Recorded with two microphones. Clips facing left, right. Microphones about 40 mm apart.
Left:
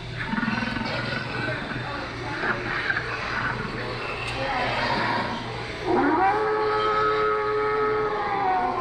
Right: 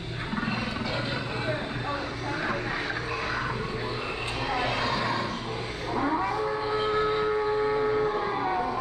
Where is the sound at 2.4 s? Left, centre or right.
Centre.